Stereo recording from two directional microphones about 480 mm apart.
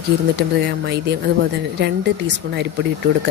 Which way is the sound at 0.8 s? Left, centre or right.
Right.